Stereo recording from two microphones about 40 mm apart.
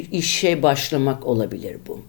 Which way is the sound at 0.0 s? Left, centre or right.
Centre.